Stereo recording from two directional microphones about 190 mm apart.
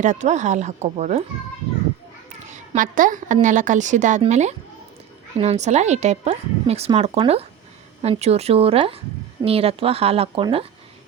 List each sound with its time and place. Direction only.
0.0 s speech: 40° right (ahead or behind)
2.5 s a woman's voice: 45° right (ahead or behind)